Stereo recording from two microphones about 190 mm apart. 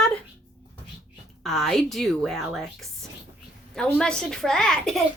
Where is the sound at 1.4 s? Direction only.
Centre (ahead or behind).